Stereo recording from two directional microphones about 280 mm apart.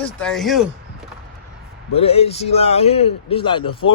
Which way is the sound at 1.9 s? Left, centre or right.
Left.